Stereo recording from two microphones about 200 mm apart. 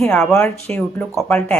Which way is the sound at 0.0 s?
5° left (ahead or behind).